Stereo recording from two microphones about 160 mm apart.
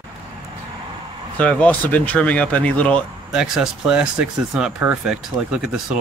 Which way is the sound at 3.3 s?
5° right (ahead or behind).